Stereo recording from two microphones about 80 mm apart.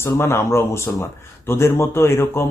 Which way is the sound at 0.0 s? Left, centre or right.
Left.